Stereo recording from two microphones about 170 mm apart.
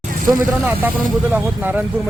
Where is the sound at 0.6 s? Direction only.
10° right (ahead or behind).